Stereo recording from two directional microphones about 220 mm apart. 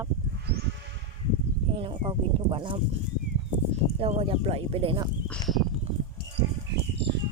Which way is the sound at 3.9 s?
25° right (ahead or behind).